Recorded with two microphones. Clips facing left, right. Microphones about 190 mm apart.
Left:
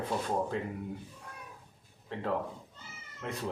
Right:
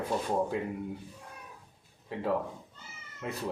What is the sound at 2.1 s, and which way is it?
Speech, 10° right (ahead or behind).